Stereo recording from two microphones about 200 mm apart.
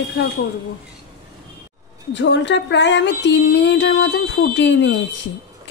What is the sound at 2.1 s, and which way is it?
Speech, 65° left (ahead or behind).